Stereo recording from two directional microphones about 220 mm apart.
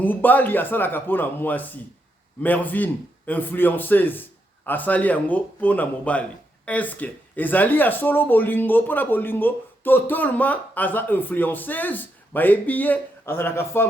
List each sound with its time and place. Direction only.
0.0 s speech: 10° left (ahead or behind)